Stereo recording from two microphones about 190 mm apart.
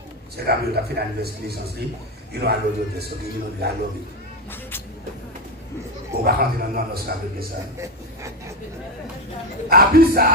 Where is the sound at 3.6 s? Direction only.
55° right (ahead or behind).